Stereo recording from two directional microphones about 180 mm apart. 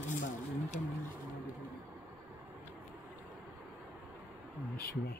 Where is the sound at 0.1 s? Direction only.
45° left (ahead or behind).